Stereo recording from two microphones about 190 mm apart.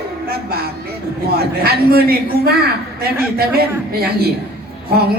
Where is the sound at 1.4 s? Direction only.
55° right (ahead or behind).